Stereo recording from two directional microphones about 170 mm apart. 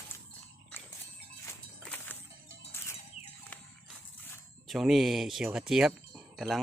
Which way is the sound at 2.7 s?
15° left (ahead or behind).